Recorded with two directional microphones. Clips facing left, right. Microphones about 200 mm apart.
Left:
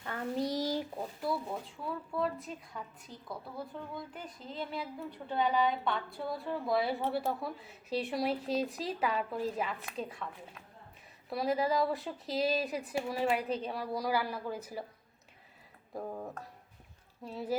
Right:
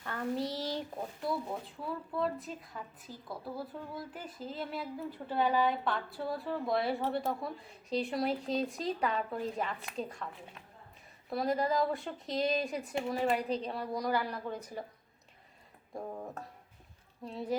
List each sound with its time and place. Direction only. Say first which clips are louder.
0.0 s a sound: even; 15° left (ahead or behind)
2.1 s a woman's voice: even; centre (ahead or behind)
11.3 s a woman's voice: even; centre (ahead or behind)
16.0 s a woman's voice: left 1 dB; centre (ahead or behind)